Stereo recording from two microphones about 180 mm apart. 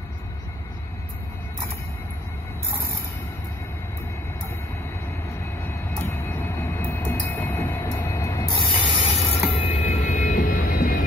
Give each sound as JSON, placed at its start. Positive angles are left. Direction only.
{"t": 5.6, "sound": "train", "side_deg": 10}
{"t": 9.8, "sound": "vehicle", "side_deg": 45}